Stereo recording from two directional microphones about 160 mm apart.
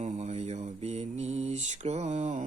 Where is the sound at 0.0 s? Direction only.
45° right (ahead or behind).